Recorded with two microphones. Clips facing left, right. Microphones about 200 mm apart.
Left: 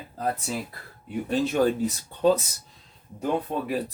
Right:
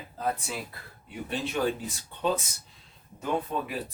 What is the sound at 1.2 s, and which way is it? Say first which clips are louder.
Speech: left 6 dB; 40° left (ahead or behind).